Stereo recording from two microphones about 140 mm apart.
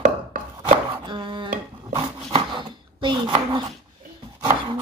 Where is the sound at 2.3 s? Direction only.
35° right (ahead or behind).